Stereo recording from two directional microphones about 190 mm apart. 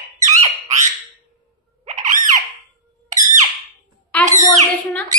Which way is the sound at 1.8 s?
40° right (ahead or behind).